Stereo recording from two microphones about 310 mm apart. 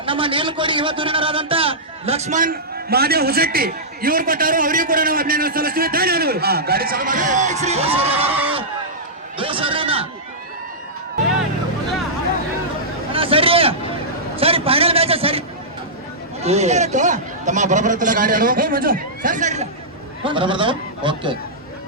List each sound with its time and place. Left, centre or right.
0.0 s a man's voice: centre
8.3 s speech: centre
9.4 s a man's voice: centre
13.1 s a sound: centre
16.4 s a man's voice: right